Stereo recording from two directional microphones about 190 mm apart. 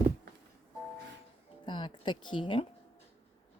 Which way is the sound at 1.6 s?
25° left (ahead or behind).